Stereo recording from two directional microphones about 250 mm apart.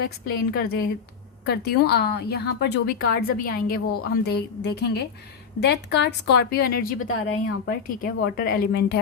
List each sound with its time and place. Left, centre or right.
0.0 s a woman's voice: left